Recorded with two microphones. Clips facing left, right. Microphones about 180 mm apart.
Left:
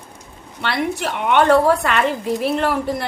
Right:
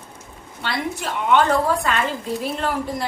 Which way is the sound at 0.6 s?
70° left (ahead or behind).